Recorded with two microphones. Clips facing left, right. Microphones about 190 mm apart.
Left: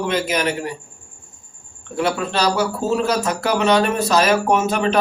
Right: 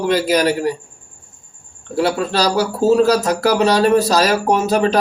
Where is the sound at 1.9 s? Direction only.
35° right (ahead or behind).